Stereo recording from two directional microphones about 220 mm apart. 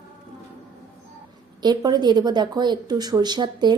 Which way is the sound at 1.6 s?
20° right (ahead or behind).